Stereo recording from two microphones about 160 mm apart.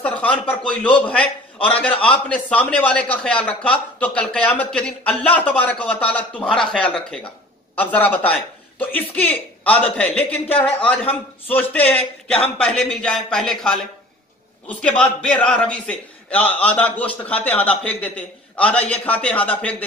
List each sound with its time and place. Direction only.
0.0 s a man's voice: 10° left (ahead or behind)